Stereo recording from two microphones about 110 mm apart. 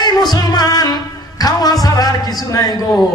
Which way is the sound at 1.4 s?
35° left (ahead or behind).